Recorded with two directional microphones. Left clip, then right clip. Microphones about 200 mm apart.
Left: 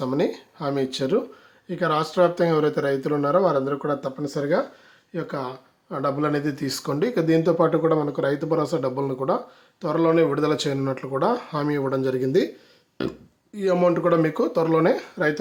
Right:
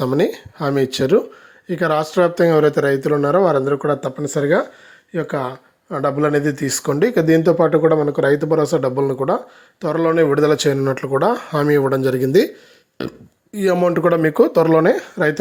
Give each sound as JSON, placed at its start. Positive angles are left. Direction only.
{"t": 0.0, "sound": "speech", "side_deg": -35}